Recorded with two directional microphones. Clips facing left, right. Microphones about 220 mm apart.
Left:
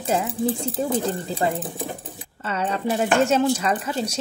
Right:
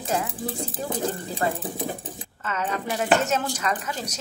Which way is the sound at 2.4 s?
35° left (ahead or behind).